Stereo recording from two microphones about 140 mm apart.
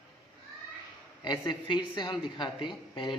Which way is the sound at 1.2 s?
35° left (ahead or behind).